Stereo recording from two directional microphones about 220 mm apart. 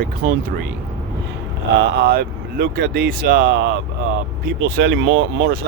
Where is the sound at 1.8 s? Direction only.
50° right (ahead or behind).